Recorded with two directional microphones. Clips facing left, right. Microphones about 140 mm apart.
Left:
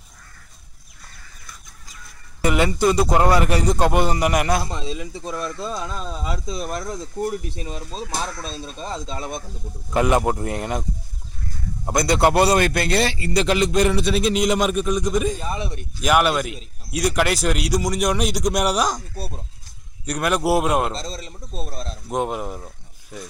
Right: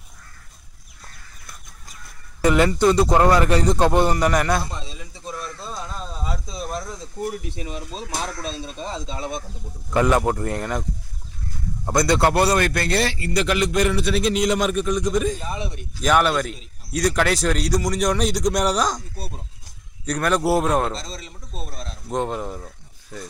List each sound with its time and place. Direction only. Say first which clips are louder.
2.8 s a man's voice: even; 10° left (ahead or behind)
4.6 s speech: left 7 dB; 90° left
7.5 s a man's voice: even; 35° left (ahead or behind)
9.9 s a man's voice: even; 15° left (ahead or behind)
20.1 s a man's voice: even; 10° left (ahead or behind)
20.9 s a man's voice: left 2 dB; 35° left (ahead or behind)
22.1 s speech: left 1 dB; 15° left (ahead or behind)